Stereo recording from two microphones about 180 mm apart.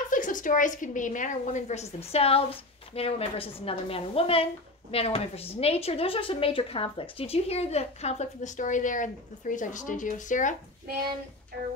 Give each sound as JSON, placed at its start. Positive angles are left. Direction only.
{"t": 0.1, "sound": "a woman's voice", "side_deg": 45}